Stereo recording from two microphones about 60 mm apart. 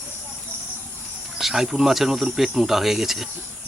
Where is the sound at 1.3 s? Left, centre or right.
Centre.